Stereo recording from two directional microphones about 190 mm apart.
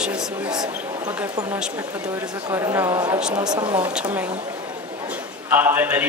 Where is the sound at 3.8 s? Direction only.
10° right (ahead or behind).